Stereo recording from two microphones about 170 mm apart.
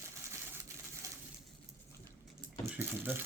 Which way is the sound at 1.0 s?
20° right (ahead or behind).